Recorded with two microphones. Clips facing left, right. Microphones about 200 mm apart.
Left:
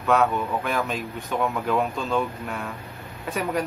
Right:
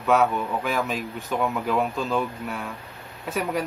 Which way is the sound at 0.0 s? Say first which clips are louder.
Even; centre (ahead or behind).